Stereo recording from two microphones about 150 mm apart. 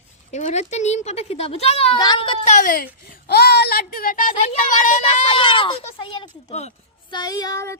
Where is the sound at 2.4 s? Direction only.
55° left (ahead or behind).